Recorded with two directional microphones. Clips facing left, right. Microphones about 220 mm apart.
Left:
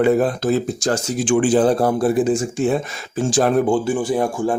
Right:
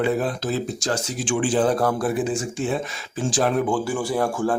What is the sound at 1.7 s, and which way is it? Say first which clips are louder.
Speech: left 5 dB; 25° left (ahead or behind).